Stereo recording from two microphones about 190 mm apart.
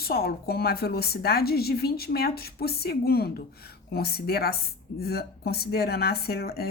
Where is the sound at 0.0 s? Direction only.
55° left (ahead or behind).